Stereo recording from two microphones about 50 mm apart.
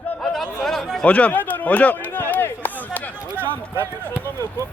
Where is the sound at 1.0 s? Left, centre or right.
Left.